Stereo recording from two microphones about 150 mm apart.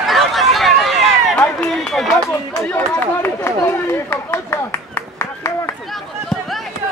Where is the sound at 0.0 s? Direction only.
Centre (ahead or behind).